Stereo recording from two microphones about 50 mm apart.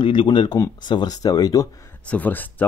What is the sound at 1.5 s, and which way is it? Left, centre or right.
Speech, left.